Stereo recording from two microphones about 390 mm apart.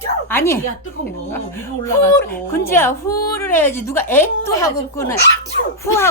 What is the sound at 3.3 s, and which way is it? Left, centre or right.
A woman's voice, centre.